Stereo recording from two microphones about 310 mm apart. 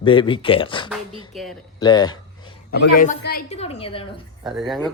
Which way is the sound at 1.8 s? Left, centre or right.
Centre.